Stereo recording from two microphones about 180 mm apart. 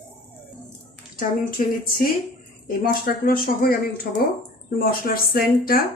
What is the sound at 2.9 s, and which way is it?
A woman's voice, 55° left (ahead or behind).